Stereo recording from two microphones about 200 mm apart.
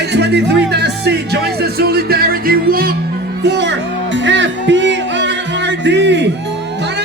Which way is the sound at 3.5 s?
60° right (ahead or behind).